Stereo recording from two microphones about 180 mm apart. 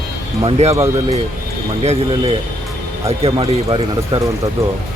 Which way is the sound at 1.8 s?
35° right (ahead or behind).